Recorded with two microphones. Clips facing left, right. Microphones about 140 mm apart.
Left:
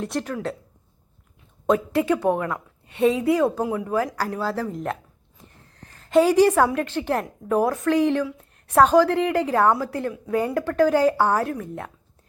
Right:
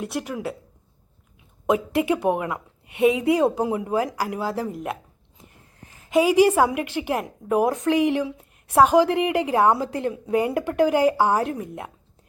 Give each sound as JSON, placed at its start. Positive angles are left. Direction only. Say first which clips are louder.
{"t": 0.0, "sound": "a woman's voice", "louder": "left 1 dB", "side_deg": -10}
{"t": 1.6, "sound": "a woman's voice", "louder": "left 1 dB", "side_deg": -15}
{"t": 6.1, "sound": "a woman's voice", "louder": "left 1 dB", "side_deg": -10}